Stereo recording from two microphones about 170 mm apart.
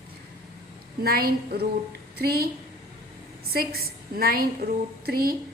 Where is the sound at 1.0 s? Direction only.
60° right (ahead or behind).